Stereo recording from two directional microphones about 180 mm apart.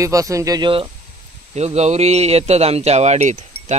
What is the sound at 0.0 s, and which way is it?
Speech, 20° right (ahead or behind).